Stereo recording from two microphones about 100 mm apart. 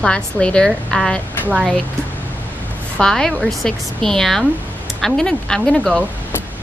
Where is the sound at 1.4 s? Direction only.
10° right (ahead or behind).